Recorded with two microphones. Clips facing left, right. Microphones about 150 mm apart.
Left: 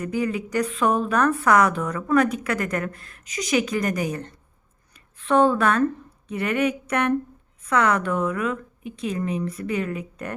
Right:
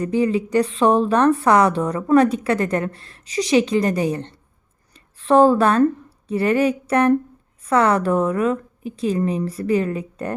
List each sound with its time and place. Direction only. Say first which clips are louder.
0.0 s a woman's voice: right 6 dB; 30° right (ahead or behind)